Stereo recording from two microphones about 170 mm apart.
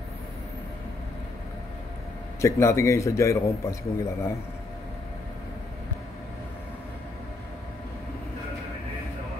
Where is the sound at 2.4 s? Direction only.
15° left (ahead or behind).